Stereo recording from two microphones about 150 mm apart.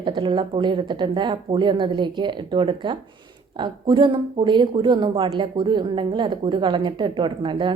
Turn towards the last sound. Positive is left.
turn(degrees=-35)  # may be behind; listen again after turning